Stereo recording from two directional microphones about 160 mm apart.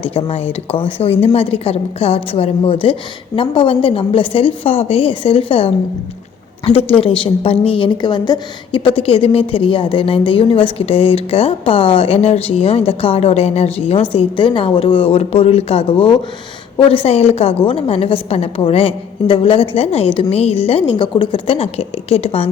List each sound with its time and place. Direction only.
0.0 s a woman's voice: 35° left (ahead or behind)